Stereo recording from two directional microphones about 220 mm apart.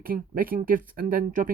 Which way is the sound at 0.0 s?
40° right (ahead or behind).